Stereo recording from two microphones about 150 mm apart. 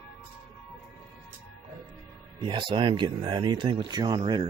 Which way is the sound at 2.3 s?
30° right (ahead or behind).